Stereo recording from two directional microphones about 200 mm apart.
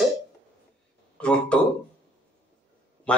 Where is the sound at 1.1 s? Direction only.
5° left (ahead or behind).